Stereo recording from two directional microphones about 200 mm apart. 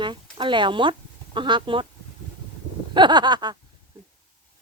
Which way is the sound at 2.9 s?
20° right (ahead or behind).